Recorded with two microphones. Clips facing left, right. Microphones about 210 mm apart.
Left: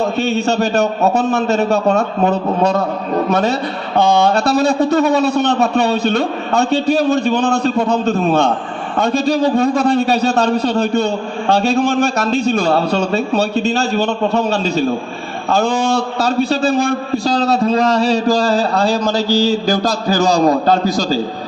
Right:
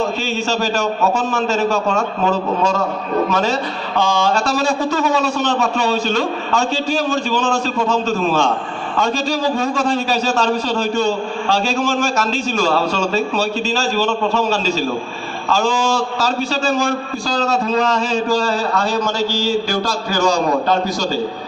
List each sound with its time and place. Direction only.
0.2 s a man's voice: 60° left (ahead or behind)
17.4 s a man's voice: 35° left (ahead or behind)